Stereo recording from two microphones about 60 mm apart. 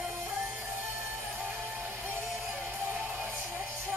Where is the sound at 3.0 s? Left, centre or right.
Right.